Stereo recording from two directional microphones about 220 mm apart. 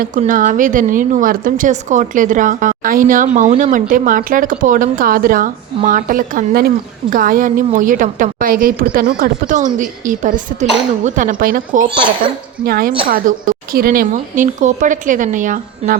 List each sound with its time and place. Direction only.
0.0 s a woman's voice: 35° right (ahead or behind)